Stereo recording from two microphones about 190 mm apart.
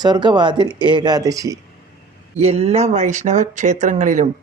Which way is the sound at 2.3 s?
30° right (ahead or behind).